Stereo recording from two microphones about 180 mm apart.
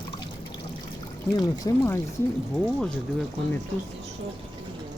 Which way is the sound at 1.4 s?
15° left (ahead or behind).